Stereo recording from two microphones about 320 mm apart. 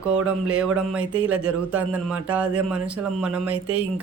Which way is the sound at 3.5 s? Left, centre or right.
Right.